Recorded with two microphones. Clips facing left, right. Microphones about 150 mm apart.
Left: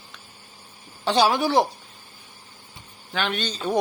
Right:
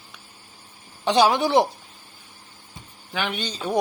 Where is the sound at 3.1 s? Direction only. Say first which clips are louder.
Left 1 dB; 10° right (ahead or behind).